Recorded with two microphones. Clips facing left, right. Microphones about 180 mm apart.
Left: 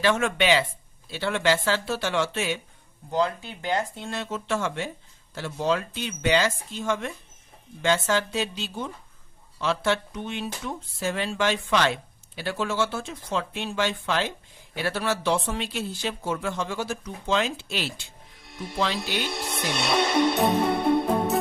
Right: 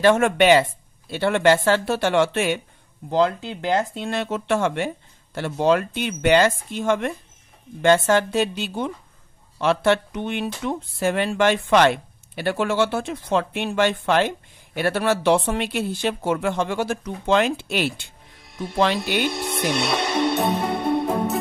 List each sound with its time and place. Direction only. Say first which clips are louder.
0.0 s speech: right 7 dB; 55° right (ahead or behind)
3.1 s speech: right 5 dB; 80° right; by 18.0 s 55° right (ahead or behind)
19.0 s speech: right 7 dB; 60° right (ahead or behind)
19.3 s music: right 5 dB; centre (ahead or behind)